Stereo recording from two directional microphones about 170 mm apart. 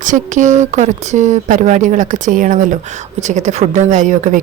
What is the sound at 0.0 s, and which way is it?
A woman's voice, 45° right (ahead or behind).